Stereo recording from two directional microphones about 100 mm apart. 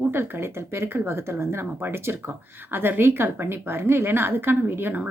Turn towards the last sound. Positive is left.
turn(degrees=-20)  # may be behind; listen again after turning